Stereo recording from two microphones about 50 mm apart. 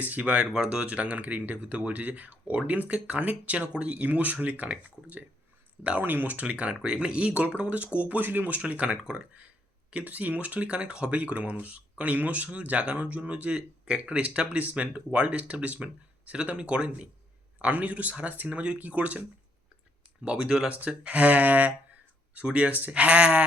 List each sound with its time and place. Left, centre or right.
0.0 s speech: right
0.5 s speech: centre
6.0 s speech: right
20.2 s speech: centre
20.7 s speech: right